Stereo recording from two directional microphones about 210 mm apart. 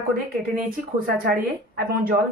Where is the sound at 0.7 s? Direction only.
45° right (ahead or behind).